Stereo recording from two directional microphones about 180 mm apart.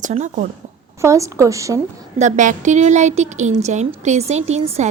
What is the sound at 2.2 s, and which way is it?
A woman's voice, 45° right (ahead or behind).